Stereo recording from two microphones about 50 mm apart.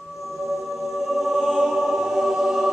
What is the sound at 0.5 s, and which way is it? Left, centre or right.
Music, centre.